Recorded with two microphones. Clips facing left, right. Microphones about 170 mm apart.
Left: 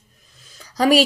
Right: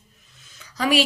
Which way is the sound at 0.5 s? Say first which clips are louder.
Left 5 dB; 40° left (ahead or behind).